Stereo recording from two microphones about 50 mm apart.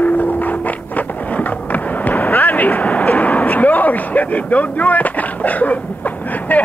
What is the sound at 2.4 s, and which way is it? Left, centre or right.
Vehicle, left.